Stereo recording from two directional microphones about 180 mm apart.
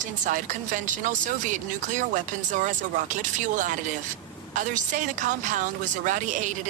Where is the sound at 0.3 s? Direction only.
45° right (ahead or behind).